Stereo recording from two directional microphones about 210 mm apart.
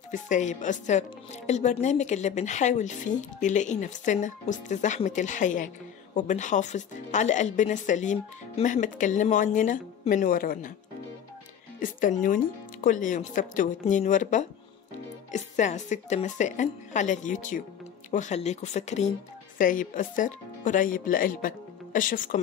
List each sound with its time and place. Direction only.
0.1 s speech: 35° left (ahead or behind)
11.8 s speech: 40° left (ahead or behind)